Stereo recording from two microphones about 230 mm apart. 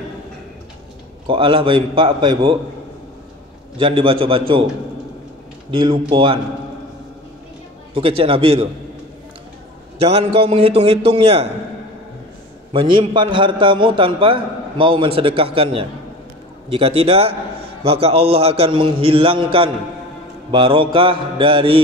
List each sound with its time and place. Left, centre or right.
1.2 s a man's voice: right
3.7 s a man's voice: right
5.7 s a man's voice: right
7.9 s a man's voice: right
9.9 s a man's voice: right
12.7 s a man's voice: right